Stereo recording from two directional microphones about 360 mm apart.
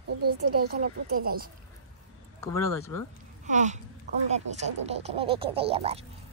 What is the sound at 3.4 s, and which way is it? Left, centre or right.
Speech, centre.